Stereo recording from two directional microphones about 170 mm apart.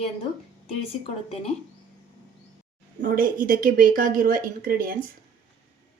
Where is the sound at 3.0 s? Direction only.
55° right (ahead or behind).